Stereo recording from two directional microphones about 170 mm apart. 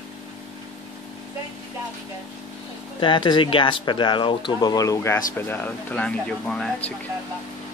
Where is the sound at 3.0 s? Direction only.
25° left (ahead or behind); by 6.7 s 5° left (ahead or behind).